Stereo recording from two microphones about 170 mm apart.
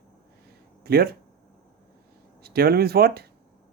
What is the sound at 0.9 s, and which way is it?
Speech, 65° right (ahead or behind).